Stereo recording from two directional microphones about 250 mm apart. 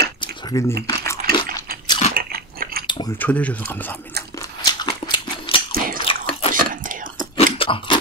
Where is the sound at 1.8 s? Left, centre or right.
Centre.